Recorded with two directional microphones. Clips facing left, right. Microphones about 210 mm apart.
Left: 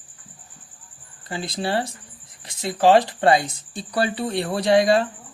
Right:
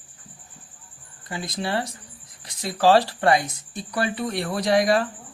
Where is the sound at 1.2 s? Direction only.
30° left (ahead or behind).